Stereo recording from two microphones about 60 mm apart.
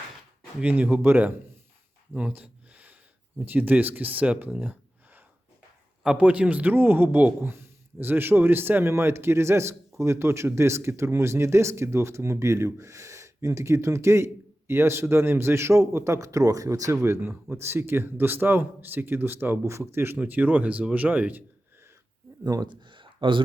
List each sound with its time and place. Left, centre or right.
0.6 s a man's voice: right
2.1 s a sound: right
3.4 s a man's voice: right
15.9 s speech: right
16.1 s speech: right
16.9 s speech: right
17.2 s speech: right
17.6 s speech: right
19.6 s speech: right
20.1 s a man's voice: right